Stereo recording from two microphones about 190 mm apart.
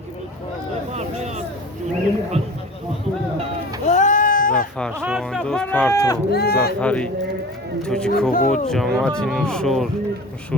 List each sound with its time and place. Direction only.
0.9 s a sound: 35° right (ahead or behind)
3.8 s a sound: 40° left (ahead or behind)
4.9 s speech: 5° right (ahead or behind); by 6.1 s 10° left (ahead or behind)
6.3 s speech: 55° left (ahead or behind)
6.7 s speech: 5° left (ahead or behind)
8.3 s speech: 45° left (ahead or behind)
8.7 s speech: 5° left (ahead or behind)